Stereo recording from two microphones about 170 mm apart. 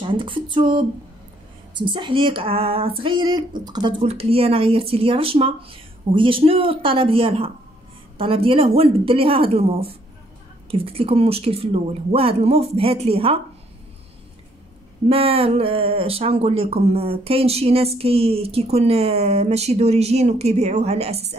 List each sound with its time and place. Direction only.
0.0 s speech: 30° right (ahead or behind)
15.0 s speech: 35° right (ahead or behind)